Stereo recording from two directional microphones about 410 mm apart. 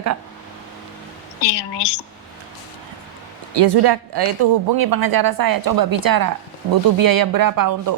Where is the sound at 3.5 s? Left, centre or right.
Right.